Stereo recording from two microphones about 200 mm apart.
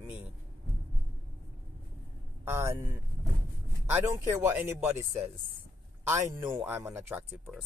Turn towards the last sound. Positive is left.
turn(degrees=-5)  # may be behind; listen again after turning